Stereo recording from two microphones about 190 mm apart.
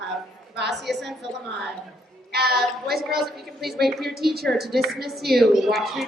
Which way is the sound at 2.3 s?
55° right (ahead or behind).